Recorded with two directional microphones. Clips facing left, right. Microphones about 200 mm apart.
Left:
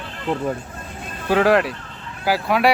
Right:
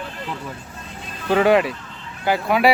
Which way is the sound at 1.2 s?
Centre (ahead or behind).